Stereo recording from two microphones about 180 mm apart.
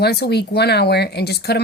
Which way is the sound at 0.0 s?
65° left (ahead or behind).